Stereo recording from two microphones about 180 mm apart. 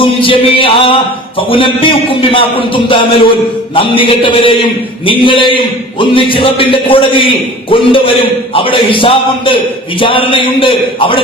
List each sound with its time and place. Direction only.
0.0 s a man's voice: 30° left (ahead or behind)